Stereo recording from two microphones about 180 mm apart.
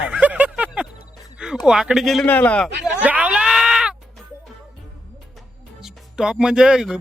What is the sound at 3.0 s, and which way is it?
Groan, 5° right (ahead or behind).